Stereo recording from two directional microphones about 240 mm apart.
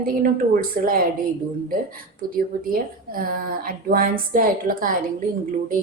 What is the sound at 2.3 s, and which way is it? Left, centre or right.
Speech, right.